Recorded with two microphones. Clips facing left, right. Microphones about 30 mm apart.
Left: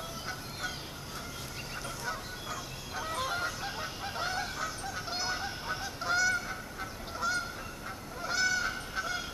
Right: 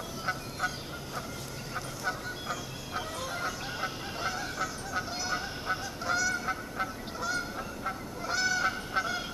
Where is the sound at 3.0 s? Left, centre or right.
Centre.